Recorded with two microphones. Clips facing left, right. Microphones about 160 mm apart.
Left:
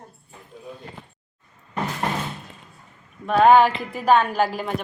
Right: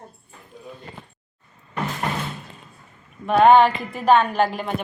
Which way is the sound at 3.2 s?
Centre (ahead or behind).